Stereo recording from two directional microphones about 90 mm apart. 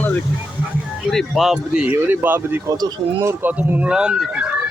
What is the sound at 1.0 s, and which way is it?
Speech, centre (ahead or behind).